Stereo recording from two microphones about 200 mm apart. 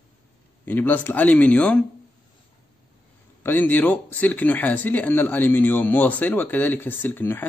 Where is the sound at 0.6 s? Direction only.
10° left (ahead or behind).